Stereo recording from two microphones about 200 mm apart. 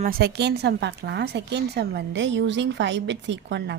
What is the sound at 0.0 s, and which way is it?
A woman's voice, 50° right (ahead or behind).